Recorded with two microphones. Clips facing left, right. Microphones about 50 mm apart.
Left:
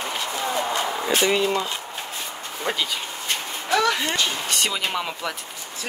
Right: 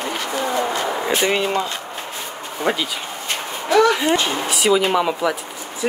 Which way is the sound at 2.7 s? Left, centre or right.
Centre.